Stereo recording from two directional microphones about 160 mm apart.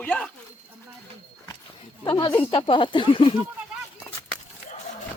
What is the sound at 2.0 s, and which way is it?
A woman's voice, 30° left (ahead or behind).